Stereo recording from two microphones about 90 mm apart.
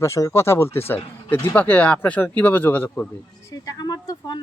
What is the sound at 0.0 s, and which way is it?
Speech, 35° left (ahead or behind).